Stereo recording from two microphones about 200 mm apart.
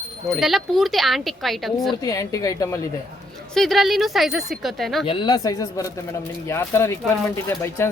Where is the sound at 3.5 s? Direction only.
Centre (ahead or behind).